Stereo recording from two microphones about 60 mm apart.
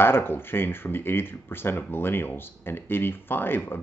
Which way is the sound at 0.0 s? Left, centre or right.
Left.